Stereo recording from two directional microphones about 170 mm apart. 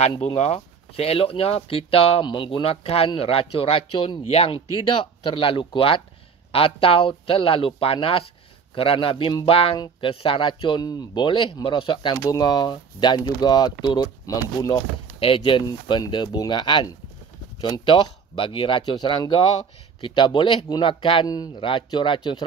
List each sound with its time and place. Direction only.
0.0 s speech: 35° left (ahead or behind)